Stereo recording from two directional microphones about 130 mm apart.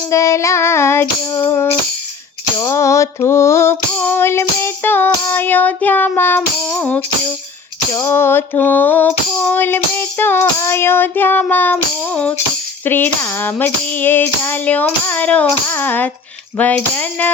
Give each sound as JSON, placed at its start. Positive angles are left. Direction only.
{"t": 0.1, "sound": "music", "side_deg": 25}
{"t": 3.9, "sound": "female singing", "side_deg": 15}
{"t": 7.9, "sound": "female singing", "side_deg": 20}